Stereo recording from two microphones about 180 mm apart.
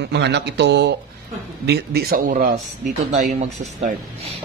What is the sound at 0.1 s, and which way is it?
Speech, 70° right (ahead or behind).